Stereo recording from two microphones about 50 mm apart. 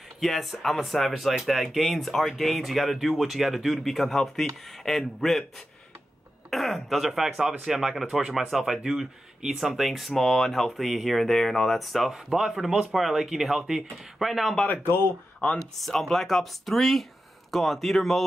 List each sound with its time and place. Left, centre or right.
0.2 s speech: centre
6.5 s speech: centre
14.8 s speech: left
15.4 s speech: centre